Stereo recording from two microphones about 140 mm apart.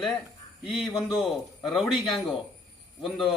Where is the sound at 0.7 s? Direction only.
Centre (ahead or behind).